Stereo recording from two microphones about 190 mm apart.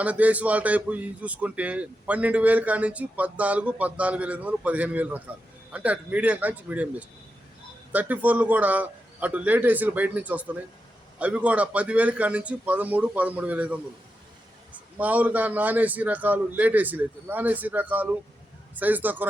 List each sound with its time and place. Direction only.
0.0 s a man's voice: 5° right (ahead or behind)
7.9 s a man's voice: 10° right (ahead or behind)